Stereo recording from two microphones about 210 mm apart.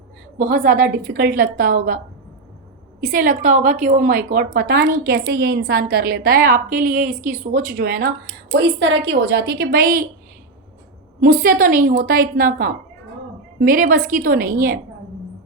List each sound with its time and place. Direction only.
0.3 s a woman's voice: 40° right (ahead or behind)
3.0 s a woman's voice: 40° right (ahead or behind)
8.5 s a woman's voice: 55° right (ahead or behind)
11.2 s a woman's voice: 40° right (ahead or behind)